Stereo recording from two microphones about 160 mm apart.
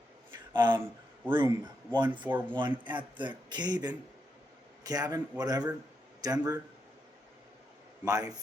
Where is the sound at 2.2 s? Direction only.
10° right (ahead or behind).